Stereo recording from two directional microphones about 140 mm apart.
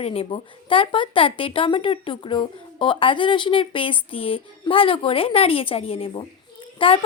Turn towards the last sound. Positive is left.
turn(degrees=40)  # may be behind; listen again after turning